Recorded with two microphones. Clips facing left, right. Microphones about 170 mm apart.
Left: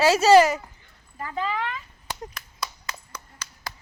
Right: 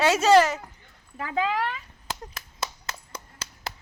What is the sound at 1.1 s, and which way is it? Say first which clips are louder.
Speech: right 3 dB; 80° right.